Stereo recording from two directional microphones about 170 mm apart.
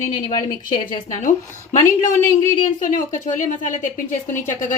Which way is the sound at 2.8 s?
50° left (ahead or behind).